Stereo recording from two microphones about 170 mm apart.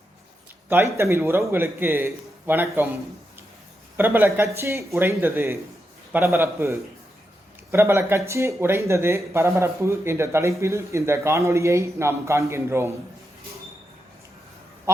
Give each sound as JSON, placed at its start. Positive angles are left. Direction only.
{"t": 0.7, "sound": "a man's voice", "side_deg": -15}
{"t": 3.9, "sound": "a man's voice", "side_deg": -10}
{"t": 14.9, "sound": "quack", "side_deg": -15}